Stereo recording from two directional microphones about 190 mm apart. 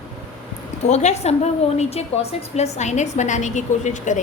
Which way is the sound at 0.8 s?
35° left (ahead or behind).